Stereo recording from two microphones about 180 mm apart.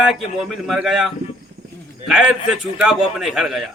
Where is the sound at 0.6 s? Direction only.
Centre (ahead or behind).